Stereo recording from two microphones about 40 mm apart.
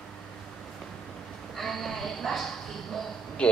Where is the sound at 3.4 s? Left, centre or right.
Left.